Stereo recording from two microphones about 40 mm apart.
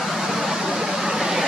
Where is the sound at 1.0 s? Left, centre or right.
Centre.